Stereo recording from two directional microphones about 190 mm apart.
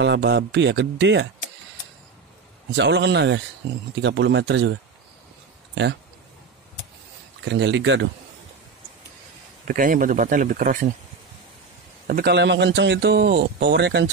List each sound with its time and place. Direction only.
0.0 s speech: 65° right (ahead or behind)
2.7 s speech: 70° right (ahead or behind)
7.4 s speech: 70° right (ahead or behind)
9.7 s speech: 45° right (ahead or behind)
12.1 s a man's voice: 55° right (ahead or behind)